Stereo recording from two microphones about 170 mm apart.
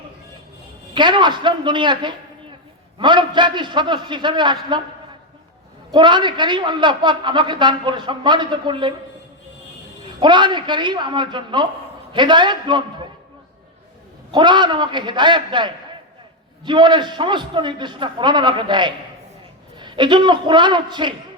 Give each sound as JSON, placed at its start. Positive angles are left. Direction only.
{"t": 0.9, "sound": "a man's voice", "side_deg": -25}
{"t": 5.9, "sound": "a man's voice", "side_deg": -25}
{"t": 10.2, "sound": "a man's voice", "side_deg": -25}
{"t": 14.3, "sound": "a man's voice", "side_deg": -25}